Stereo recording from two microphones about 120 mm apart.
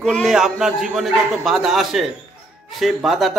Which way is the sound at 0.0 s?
Centre (ahead or behind).